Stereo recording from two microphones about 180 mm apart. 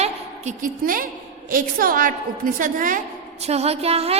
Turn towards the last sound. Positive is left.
turn(degrees=-35)  # may be behind; listen again after turning